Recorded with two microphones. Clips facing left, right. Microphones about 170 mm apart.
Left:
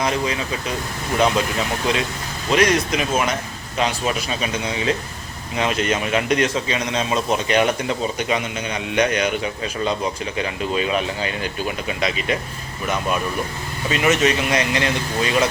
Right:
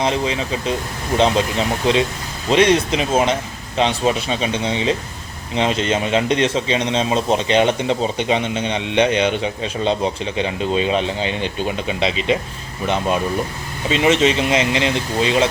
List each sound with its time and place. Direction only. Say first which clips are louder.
0.0 s a man's voice: right 2 dB; 25° right (ahead or behind)
13.9 s a man's voice: right 3 dB; 25° right (ahead or behind)